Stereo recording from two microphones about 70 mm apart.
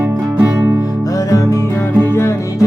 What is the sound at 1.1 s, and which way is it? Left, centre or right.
Music, left.